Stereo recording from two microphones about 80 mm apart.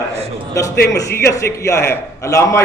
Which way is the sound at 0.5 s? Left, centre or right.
Left.